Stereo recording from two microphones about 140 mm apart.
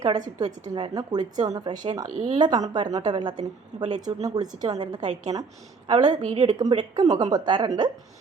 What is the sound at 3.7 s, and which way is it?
Speech, 50° right (ahead or behind).